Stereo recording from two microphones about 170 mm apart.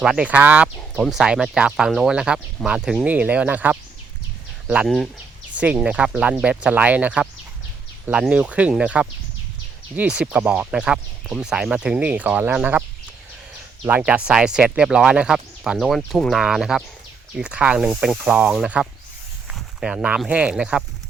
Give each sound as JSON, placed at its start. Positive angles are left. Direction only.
{"t": 0.0, "sound": "speech", "side_deg": -5}
{"t": 13.8, "sound": "speech", "side_deg": -10}